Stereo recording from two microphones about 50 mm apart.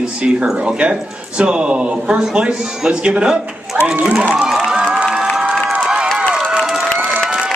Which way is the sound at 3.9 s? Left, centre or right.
Right.